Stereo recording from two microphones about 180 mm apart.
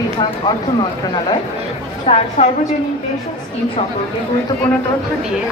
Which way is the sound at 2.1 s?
30° left (ahead or behind).